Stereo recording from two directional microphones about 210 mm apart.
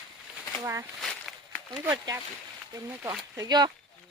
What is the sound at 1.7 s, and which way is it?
Speech, 20° right (ahead or behind).